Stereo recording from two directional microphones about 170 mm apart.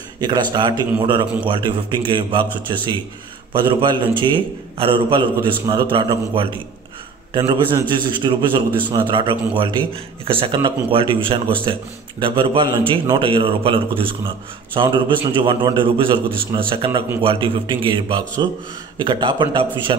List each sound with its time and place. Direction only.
0.2 s a man's voice: 25° right (ahead or behind)